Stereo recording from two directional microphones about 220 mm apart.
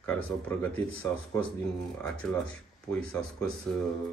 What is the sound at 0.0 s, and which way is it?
Speech, 10° left (ahead or behind).